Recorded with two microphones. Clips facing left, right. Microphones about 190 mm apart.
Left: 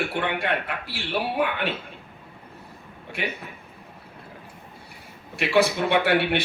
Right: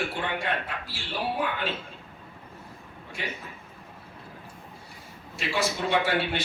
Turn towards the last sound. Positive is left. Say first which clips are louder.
# left 5 dB
turn(degrees=65)  # may be behind; listen again after turning